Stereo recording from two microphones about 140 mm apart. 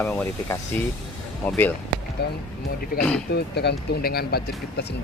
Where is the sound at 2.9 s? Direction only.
90° left.